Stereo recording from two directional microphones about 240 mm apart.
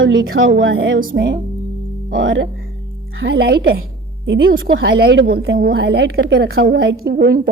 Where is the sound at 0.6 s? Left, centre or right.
Right.